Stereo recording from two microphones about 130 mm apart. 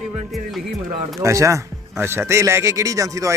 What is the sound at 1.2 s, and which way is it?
Speech, 25° right (ahead or behind).